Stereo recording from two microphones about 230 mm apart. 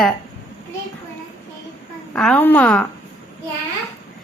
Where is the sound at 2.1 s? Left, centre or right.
Centre.